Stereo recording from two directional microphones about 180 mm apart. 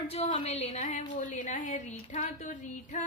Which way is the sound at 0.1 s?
30° left (ahead or behind).